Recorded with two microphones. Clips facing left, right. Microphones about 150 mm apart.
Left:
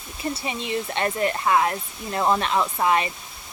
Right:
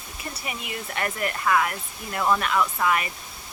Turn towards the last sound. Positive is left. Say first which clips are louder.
# left 3 dB
turn(degrees=25)  # may be behind; listen again after turning